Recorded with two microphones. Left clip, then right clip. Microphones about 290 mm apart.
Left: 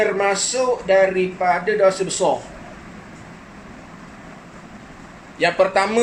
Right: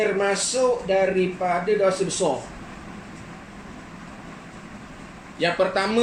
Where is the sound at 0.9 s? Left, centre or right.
Left.